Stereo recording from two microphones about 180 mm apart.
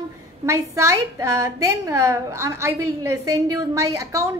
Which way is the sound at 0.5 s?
15° right (ahead or behind).